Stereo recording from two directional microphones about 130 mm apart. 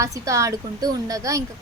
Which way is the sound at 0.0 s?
25° right (ahead or behind).